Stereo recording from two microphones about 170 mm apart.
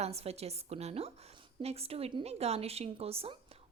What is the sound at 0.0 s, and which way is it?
Speech, 40° right (ahead or behind).